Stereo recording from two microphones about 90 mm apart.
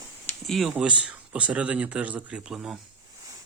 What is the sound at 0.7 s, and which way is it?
Speech, 10° right (ahead or behind).